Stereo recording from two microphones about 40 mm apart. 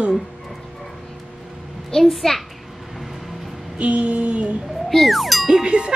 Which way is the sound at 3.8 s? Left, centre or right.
Right.